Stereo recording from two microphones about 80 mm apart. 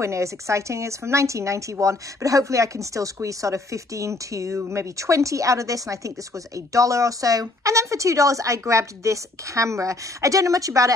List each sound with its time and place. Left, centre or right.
0.0 s speech: right